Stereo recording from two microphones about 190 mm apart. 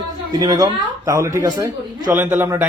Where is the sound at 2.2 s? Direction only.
10° right (ahead or behind).